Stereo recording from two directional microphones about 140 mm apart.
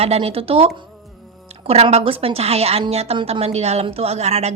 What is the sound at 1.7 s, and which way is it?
A woman's voice, 45° right (ahead or behind).